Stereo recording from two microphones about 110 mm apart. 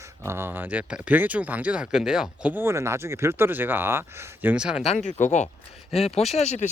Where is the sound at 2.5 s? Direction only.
20° right (ahead or behind).